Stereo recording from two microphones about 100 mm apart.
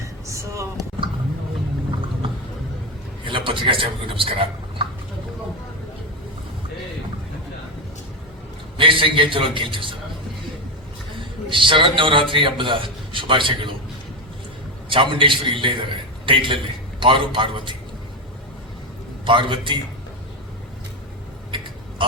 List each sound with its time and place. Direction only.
0.3 s a sound: 30° right (ahead or behind)
3.2 s a man's voice: 55° right (ahead or behind)
8.8 s a man's voice: 60° right (ahead or behind)
11.2 s a man's voice: 55° right (ahead or behind)
14.8 s a man's voice: 55° right (ahead or behind)
19.2 s a man's voice: 55° right (ahead or behind)
21.5 s a sound: 55° right (ahead or behind)